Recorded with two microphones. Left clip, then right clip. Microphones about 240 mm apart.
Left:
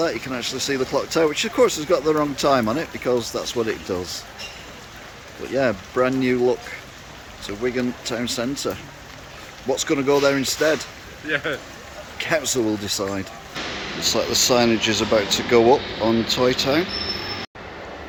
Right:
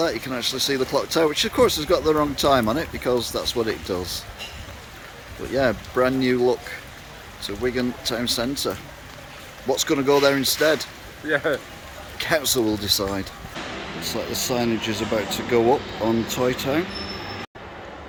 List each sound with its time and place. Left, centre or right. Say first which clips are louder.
0.0 s speech: even; centre
5.5 s speech: even; centre
11.3 s speech: right 2 dB; right
12.1 s speech: even; centre